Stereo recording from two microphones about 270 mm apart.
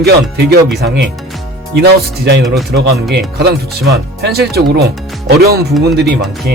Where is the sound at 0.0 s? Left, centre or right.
Right.